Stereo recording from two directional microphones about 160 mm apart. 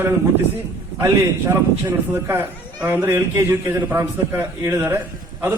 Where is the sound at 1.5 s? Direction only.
15° right (ahead or behind).